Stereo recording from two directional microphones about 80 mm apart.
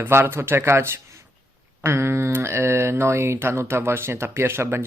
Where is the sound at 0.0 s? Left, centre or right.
Right.